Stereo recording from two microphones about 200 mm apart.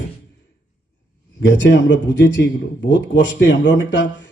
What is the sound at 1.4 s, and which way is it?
A man's voice, 65° left (ahead or behind).